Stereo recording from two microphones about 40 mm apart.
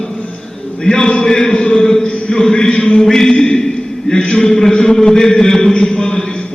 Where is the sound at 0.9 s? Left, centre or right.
Left.